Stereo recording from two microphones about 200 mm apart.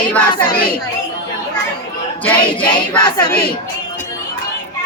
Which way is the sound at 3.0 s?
20° left (ahead or behind).